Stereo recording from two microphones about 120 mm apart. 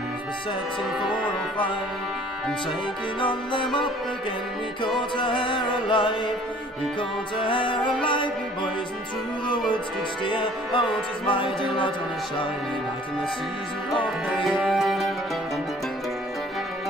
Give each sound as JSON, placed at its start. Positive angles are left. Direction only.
{"t": 3.2, "sound": "music", "side_deg": 45}
{"t": 4.8, "sound": "music", "side_deg": 45}
{"t": 10.2, "sound": "music", "side_deg": 45}
{"t": 14.4, "sound": "music", "side_deg": 0}